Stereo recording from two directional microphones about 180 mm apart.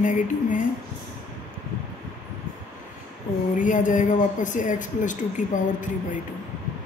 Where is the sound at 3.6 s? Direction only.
45° left (ahead or behind).